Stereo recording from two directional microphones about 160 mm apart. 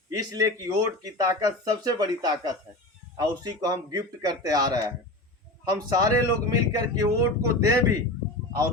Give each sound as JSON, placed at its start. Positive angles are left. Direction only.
{"t": 0.1, "sound": "speech", "side_deg": -20}